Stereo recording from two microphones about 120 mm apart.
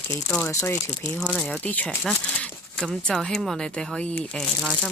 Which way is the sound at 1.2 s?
10° left (ahead or behind).